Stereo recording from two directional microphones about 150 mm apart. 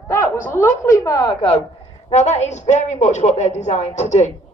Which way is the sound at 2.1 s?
50° left (ahead or behind).